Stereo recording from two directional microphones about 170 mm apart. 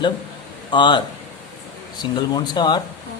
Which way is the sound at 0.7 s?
25° left (ahead or behind).